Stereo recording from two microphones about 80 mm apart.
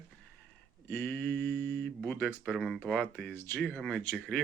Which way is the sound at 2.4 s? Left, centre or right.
Centre.